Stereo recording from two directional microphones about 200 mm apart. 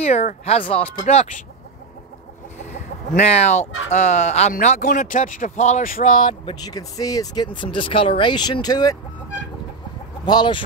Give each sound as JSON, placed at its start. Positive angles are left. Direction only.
{"t": 0.0, "sound": "speech", "side_deg": 35}
{"t": 2.6, "sound": "chicken", "side_deg": 35}
{"t": 3.9, "sound": "speech", "side_deg": 35}
{"t": 6.2, "sound": "speech", "side_deg": 20}
{"t": 10.2, "sound": "speech", "side_deg": 20}